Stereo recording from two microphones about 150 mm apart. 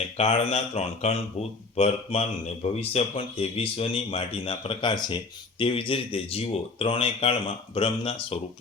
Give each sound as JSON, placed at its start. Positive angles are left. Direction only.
{"t": 0.2, "sound": "speech", "side_deg": 40}